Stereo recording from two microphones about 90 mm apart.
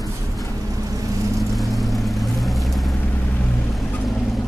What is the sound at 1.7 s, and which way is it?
Vehicle, centre (ahead or behind).